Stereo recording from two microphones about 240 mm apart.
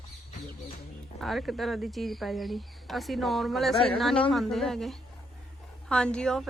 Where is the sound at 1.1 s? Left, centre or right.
Centre.